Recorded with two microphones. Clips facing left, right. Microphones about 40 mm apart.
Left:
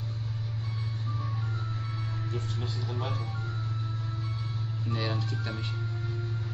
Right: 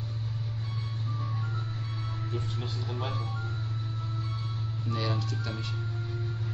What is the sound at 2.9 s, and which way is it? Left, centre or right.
Speech, centre.